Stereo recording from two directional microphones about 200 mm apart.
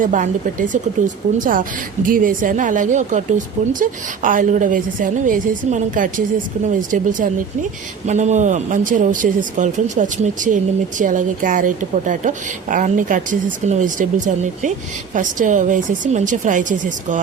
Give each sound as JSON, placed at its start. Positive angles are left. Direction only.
{"t": 0.0, "sound": "speech", "side_deg": -40}